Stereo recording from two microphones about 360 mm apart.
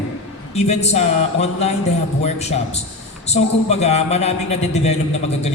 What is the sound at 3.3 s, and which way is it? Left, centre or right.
A man's voice, centre.